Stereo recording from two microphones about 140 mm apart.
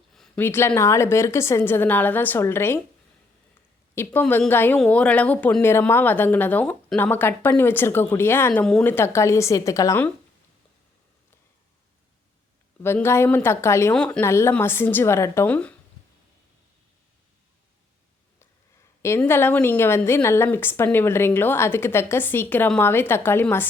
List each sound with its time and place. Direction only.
0.3 s a woman's voice: 15° left (ahead or behind)
3.9 s a woman's voice: 15° left (ahead or behind)
12.8 s a woman's voice: 15° left (ahead or behind)
13.9 s a woman's voice: 10° left (ahead or behind)
14.3 s a woman's voice: 20° left (ahead or behind)
19.0 s a woman's voice: 15° left (ahead or behind)